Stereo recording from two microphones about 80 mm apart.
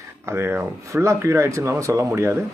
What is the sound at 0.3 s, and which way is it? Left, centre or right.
Speech, right.